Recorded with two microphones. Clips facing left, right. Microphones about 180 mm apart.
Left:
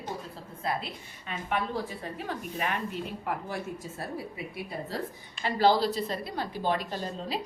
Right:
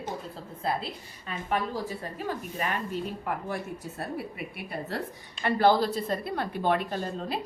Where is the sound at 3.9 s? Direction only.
65° right (ahead or behind).